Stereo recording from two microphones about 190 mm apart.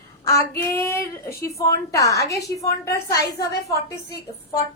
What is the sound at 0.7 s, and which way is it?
A woman's voice, 15° left (ahead or behind).